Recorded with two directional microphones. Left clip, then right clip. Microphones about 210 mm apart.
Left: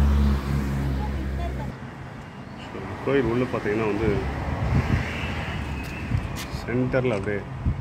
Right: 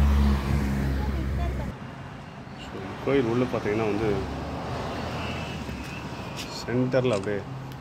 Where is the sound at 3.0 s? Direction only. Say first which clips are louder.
Left 1 dB; 10° right (ahead or behind).